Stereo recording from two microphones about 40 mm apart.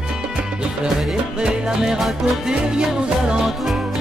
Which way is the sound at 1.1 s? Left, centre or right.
Right.